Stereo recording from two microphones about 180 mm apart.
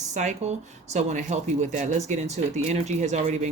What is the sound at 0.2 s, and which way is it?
Speech, 40° right (ahead or behind).